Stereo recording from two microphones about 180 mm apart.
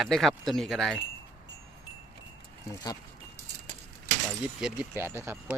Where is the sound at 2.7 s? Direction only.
20° left (ahead or behind).